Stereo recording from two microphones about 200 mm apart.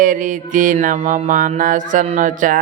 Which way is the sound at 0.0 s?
40° right (ahead or behind).